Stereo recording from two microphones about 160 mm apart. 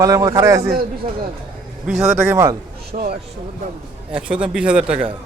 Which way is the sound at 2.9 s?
45° right (ahead or behind).